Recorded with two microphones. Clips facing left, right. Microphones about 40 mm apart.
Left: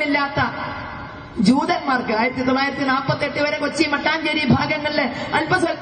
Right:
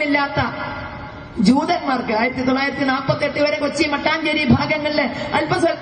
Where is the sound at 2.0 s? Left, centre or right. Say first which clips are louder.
Right 1 dB; right.